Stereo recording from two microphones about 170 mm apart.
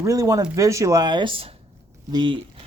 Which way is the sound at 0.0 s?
20° right (ahead or behind).